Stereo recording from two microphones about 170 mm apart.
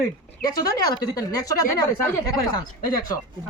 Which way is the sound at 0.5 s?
20° left (ahead or behind).